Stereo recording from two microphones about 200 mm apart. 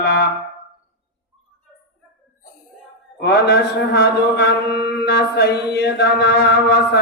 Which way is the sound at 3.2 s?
55° left (ahead or behind).